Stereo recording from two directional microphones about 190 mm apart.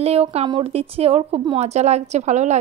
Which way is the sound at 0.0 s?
30° right (ahead or behind).